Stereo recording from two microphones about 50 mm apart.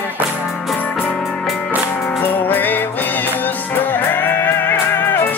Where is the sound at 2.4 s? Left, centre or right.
Left.